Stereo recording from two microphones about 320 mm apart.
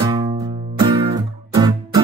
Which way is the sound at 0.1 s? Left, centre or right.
Centre.